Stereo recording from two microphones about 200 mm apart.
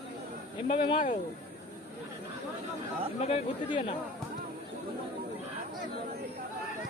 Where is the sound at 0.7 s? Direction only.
25° left (ahead or behind).